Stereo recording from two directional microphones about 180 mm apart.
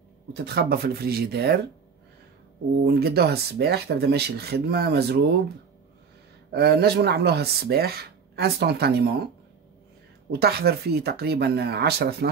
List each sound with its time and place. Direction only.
0.3 s speech: 60° right (ahead or behind)
2.8 s speech: 60° right (ahead or behind)
6.5 s speech: 60° right (ahead or behind)
10.3 s speech: 60° right (ahead or behind)